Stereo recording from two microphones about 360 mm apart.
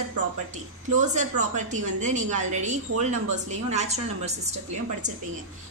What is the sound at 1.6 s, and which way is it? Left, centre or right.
A woman's voice, centre.